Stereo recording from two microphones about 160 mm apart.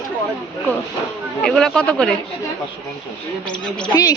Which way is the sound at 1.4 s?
5° left (ahead or behind).